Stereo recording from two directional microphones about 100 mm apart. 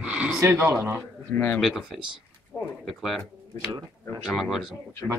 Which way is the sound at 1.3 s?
20° left (ahead or behind).